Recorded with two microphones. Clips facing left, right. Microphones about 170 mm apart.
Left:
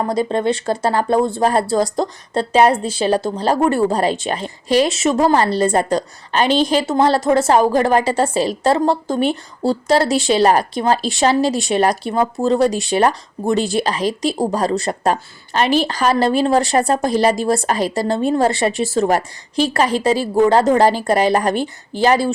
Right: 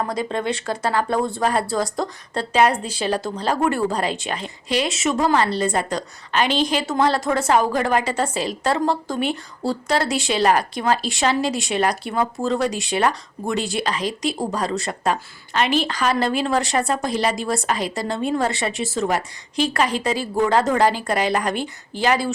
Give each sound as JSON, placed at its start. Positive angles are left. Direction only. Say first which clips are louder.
{"t": 0.0, "sound": "speech", "louder": "left 6 dB", "side_deg": 30}
{"t": 12.5, "sound": "speech", "louder": "left 6 dB", "side_deg": 40}